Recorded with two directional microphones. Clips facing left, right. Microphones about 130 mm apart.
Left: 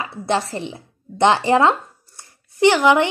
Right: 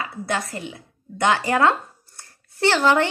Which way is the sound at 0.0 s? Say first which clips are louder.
Left 5 dB; 25° left (ahead or behind).